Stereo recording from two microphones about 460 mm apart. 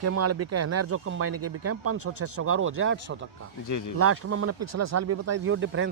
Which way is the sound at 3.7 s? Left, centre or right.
Left.